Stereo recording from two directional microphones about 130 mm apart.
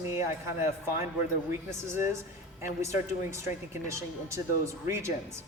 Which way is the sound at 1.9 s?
20° right (ahead or behind).